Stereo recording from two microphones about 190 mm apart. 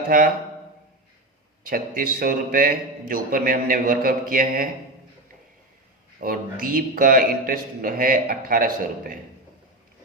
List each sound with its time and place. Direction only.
1.6 s a man's voice: 50° right (ahead or behind)
6.1 s a man's voice: 50° right (ahead or behind)